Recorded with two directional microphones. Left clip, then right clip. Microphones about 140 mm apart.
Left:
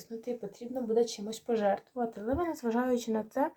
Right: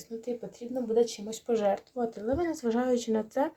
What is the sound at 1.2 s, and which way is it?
Speech, 5° left (ahead or behind).